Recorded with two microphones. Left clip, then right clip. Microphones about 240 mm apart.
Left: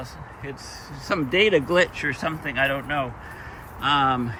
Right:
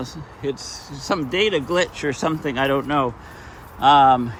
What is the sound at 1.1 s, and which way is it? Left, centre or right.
Speech, centre.